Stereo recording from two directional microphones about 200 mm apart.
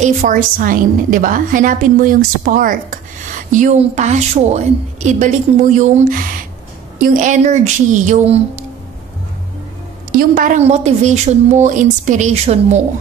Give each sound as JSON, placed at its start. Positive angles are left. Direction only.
{"t": 0.0, "sound": "a woman's voice", "side_deg": -40}
{"t": 10.1, "sound": "a woman's voice", "side_deg": -45}